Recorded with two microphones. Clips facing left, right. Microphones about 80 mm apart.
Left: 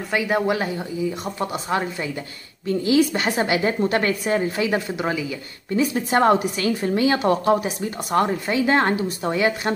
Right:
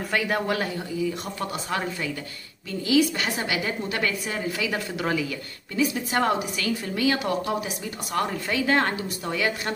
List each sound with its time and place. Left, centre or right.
0.1 s speech: centre
2.6 s a woman's voice: left; by 5.4 s centre
5.8 s a woman's voice: left